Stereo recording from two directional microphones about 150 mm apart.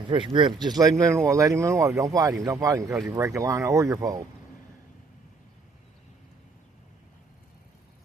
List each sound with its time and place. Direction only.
0.1 s a man's voice: 35° right (ahead or behind)
0.8 s speech: 25° right (ahead or behind)